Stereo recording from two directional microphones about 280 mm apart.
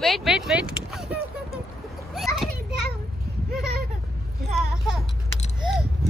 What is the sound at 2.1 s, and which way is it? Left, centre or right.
Children playing, centre.